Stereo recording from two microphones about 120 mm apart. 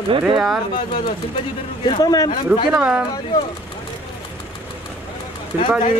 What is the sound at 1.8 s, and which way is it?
Speech, 35° left (ahead or behind).